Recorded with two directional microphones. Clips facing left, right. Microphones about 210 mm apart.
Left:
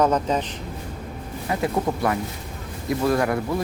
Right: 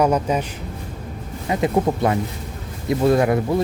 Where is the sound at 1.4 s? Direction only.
20° right (ahead or behind).